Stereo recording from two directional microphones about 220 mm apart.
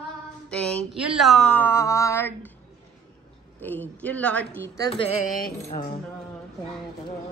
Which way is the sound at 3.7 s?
5° left (ahead or behind).